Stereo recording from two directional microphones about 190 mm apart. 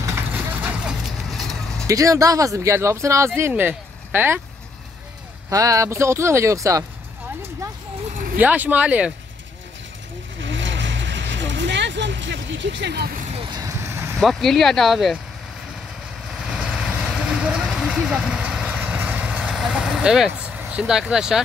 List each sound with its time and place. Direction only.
0.0 s clip-clop: 10° right (ahead or behind)
1.9 s speech: 15° right (ahead or behind)
5.5 s speech: 20° right (ahead or behind)
8.4 s speech: 10° right (ahead or behind)
10.4 s vehicle: 75° right (ahead or behind); by 13.2 s 55° right (ahead or behind)
13.3 s vehicle: 25° right (ahead or behind)
14.2 s speech: centre (ahead or behind)
16.4 s vehicle: 5° right (ahead or behind)
20.7 s speech: 5° right (ahead or behind)